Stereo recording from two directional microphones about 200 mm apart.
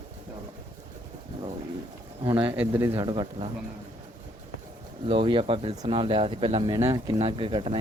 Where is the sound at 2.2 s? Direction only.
25° right (ahead or behind).